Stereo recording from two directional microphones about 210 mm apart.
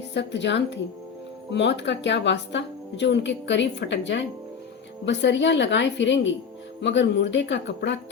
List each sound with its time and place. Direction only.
0.1 s speech: 55° left (ahead or behind)